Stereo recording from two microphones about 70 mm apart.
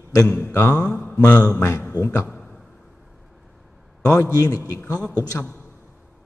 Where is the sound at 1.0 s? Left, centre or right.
Left.